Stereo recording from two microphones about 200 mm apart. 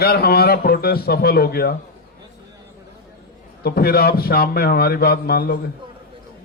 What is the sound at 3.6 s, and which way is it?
A man's voice, 50° left (ahead or behind).